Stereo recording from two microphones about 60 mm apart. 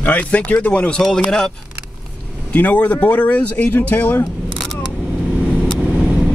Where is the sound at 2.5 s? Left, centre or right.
Left.